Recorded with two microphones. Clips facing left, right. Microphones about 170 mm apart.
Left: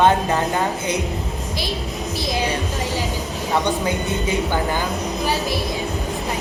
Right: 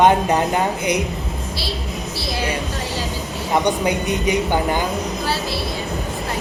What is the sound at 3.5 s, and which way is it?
Speech, 15° right (ahead or behind).